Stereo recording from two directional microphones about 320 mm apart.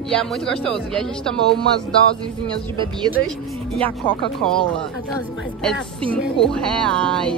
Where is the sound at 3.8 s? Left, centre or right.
Centre.